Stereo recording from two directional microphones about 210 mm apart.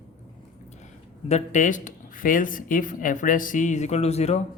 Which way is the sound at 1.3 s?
35° left (ahead or behind).